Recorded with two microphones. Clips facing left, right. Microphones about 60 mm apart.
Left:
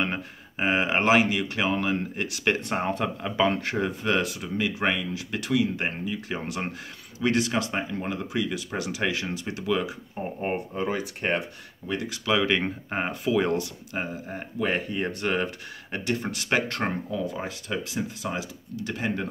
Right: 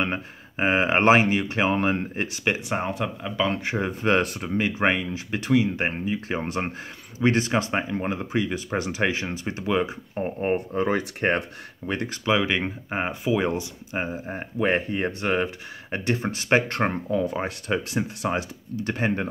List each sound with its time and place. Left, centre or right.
0.0 s speech: centre
0.7 s speech: right
2.4 s speech: centre
3.6 s speech: centre
4.0 s speech: right
10.7 s speech: right
12.3 s speech: centre
16.0 s speech: right
17.2 s speech: right